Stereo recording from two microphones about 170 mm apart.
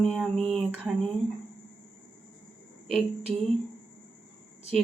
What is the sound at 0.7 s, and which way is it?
Speech, 10° right (ahead or behind).